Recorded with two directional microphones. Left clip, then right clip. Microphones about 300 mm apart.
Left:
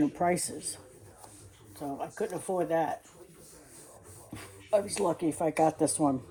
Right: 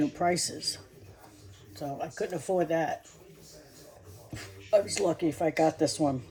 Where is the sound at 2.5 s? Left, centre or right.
Centre.